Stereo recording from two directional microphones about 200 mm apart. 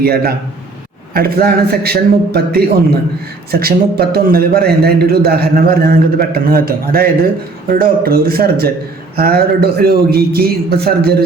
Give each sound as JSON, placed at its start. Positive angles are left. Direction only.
{"t": 0.0, "sound": "a man's voice", "side_deg": -50}